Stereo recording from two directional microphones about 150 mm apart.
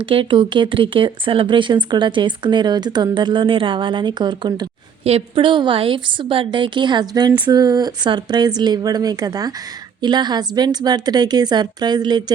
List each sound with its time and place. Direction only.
0.0 s speech: 35° right (ahead or behind)
5.0 s a woman's voice: 40° right (ahead or behind)